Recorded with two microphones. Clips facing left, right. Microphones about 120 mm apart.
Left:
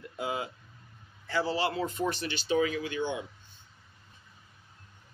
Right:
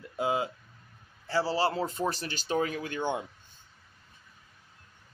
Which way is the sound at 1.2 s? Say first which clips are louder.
Right 2 dB; 35° right (ahead or behind).